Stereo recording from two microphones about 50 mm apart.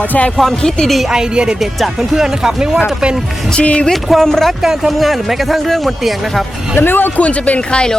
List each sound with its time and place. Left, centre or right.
0.3 s speech: centre
1.1 s speech: centre
3.5 s speech: left
3.9 s speech: centre
4.6 s speech: centre
6.7 s speech: left
7.2 s speech: left